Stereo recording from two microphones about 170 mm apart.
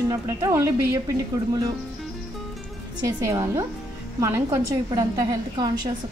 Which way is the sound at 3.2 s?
20° right (ahead or behind).